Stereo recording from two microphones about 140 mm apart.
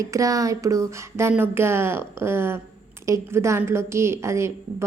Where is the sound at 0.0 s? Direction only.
25° right (ahead or behind).